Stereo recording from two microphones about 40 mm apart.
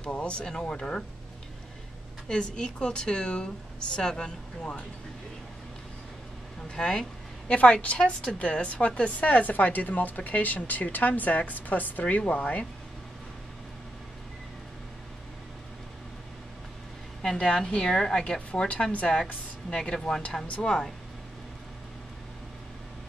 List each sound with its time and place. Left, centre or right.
0.0 s a woman's voice: left
2.2 s a woman's voice: left
6.7 s a woman's voice: left
9.2 s speech: left
17.2 s a woman's voice: centre